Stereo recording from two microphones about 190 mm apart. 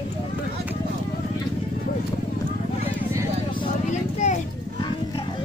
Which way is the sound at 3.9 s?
40° left (ahead or behind).